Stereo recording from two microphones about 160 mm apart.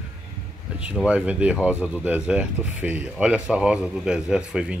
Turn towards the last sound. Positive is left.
turn(degrees=-5)  # may be behind; listen again after turning